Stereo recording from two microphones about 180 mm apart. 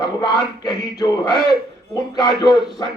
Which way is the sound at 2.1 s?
20° left (ahead or behind).